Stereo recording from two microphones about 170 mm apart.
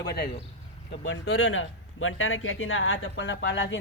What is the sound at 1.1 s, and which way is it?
Speech, 90° left.